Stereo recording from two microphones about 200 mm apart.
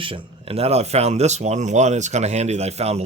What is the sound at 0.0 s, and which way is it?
Speech, 25° right (ahead or behind).